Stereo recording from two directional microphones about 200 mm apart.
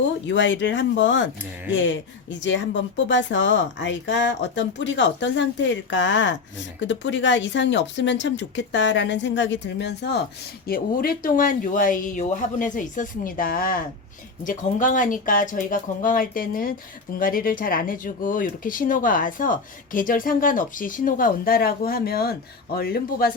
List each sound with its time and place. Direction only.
0.0 s speech: 65° left (ahead or behind)
10.7 s speech: 45° left (ahead or behind)